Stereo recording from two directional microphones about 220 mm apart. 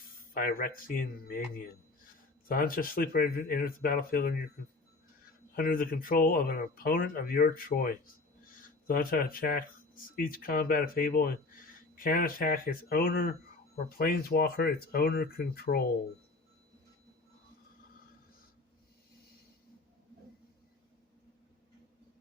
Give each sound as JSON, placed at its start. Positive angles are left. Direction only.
{"t": 0.3, "sound": "speech", "side_deg": 40}
{"t": 5.5, "sound": "speech", "side_deg": 40}